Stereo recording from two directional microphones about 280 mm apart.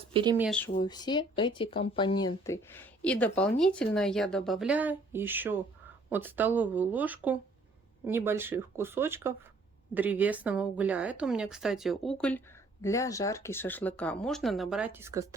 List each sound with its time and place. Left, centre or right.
0.1 s speech: centre
0.3 s speech: centre
0.8 s speech: centre